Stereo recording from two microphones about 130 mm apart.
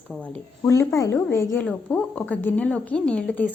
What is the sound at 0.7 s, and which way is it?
Speech, 25° left (ahead or behind).